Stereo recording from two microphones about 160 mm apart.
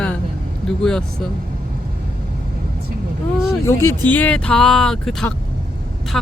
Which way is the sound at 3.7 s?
15° left (ahead or behind).